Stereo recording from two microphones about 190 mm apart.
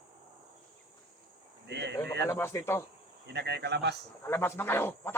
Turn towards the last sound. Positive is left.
turn(degrees=10)  # may be behind; listen again after turning